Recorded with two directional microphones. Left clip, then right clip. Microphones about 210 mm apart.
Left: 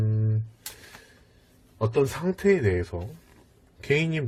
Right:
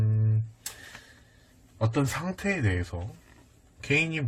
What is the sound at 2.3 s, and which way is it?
Speech, 20° left (ahead or behind).